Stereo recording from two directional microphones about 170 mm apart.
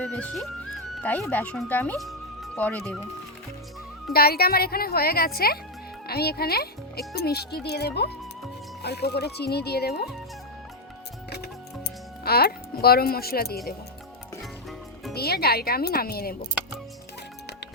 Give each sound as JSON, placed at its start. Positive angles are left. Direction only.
{"t": 0.0, "sound": "music", "side_deg": 5}
{"t": 1.0, "sound": "speech", "side_deg": 10}
{"t": 4.1, "sound": "speech", "side_deg": 65}
{"t": 12.2, "sound": "speech", "side_deg": 65}
{"t": 15.1, "sound": "speech", "side_deg": 65}